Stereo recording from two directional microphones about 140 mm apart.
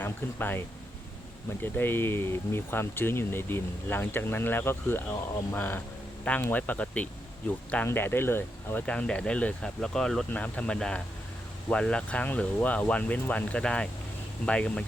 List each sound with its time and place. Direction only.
0.0 s speech: 15° left (ahead or behind)
1.6 s speech: 15° left (ahead or behind)